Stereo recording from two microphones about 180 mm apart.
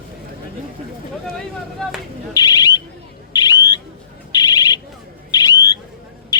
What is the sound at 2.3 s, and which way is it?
Bird, 20° left (ahead or behind).